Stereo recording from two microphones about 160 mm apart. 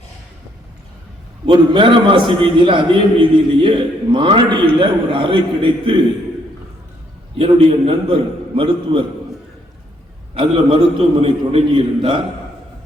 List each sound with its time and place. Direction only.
1.5 s a man's voice: 30° right (ahead or behind)
7.3 s a man's voice: 35° right (ahead or behind)
10.3 s a man's voice: 35° right (ahead or behind)